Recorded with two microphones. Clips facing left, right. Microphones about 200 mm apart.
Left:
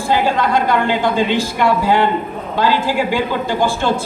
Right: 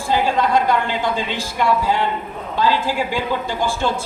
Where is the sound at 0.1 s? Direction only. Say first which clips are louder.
Left 1 dB; 70° left (ahead or behind).